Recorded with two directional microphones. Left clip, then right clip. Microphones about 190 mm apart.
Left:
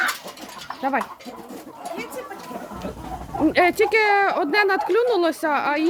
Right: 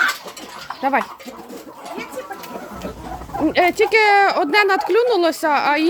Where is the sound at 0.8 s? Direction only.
15° right (ahead or behind).